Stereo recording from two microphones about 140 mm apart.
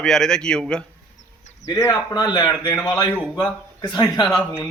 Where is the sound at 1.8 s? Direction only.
25° left (ahead or behind).